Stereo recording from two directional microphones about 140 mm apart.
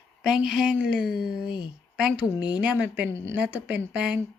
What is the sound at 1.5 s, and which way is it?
Speech, 35° left (ahead or behind).